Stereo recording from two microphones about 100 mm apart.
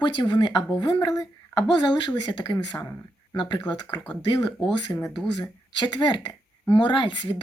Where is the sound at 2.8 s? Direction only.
25° left (ahead or behind).